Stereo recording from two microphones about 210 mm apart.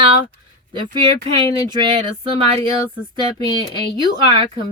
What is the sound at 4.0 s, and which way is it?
Speech, 25° right (ahead or behind).